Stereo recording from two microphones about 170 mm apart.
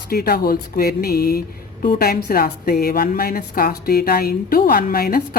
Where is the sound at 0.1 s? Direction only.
65° left (ahead or behind).